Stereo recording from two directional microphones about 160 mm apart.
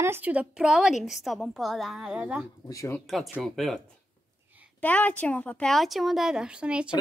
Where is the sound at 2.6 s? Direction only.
20° left (ahead or behind).